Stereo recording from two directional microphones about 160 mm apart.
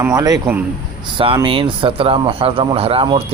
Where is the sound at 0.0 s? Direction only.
20° right (ahead or behind).